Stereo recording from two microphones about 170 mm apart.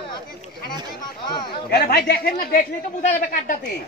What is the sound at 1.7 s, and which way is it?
Speech, 65° left (ahead or behind).